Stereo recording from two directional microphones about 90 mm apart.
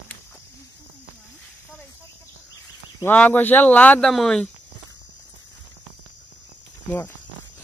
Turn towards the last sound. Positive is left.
turn(degrees=25)  # may be behind; listen again after turning